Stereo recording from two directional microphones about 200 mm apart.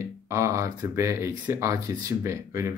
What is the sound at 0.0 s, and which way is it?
A man's voice, 15° right (ahead or behind).